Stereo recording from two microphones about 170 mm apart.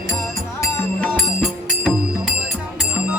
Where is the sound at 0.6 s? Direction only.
10° left (ahead or behind).